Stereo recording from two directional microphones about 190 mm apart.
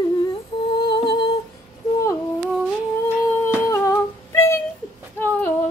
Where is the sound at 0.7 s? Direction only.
25° left (ahead or behind).